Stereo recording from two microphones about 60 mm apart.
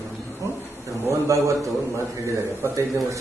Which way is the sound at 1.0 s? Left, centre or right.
Right.